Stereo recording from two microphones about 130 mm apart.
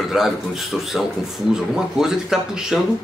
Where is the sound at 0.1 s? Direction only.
Centre (ahead or behind).